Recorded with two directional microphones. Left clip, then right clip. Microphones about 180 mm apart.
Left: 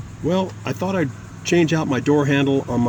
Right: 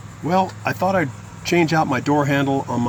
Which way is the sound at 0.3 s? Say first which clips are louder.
Right 3 dB; 10° left (ahead or behind).